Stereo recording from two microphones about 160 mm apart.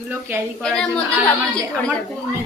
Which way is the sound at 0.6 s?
5° left (ahead or behind).